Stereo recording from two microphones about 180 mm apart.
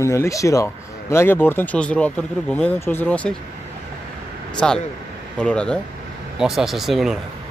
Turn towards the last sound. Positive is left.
turn(degrees=0)  # may be behind; listen again after turning